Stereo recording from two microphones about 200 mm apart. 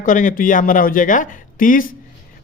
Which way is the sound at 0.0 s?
40° left (ahead or behind).